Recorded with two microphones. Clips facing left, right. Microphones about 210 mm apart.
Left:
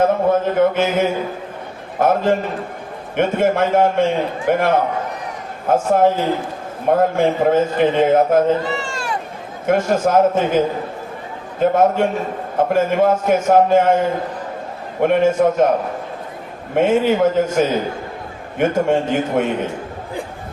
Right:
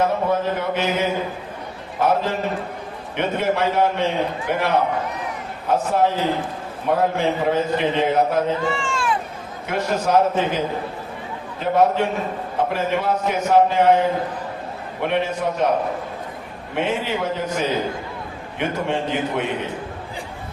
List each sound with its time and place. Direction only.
0.0 s a man's voice: 50° left (ahead or behind)
11.6 s a man's voice: 50° left (ahead or behind)
15.0 s a man's voice: 45° left (ahead or behind)
16.7 s a man's voice: 50° left (ahead or behind)